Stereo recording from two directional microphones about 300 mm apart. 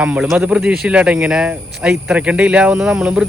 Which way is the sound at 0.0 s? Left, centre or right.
Centre.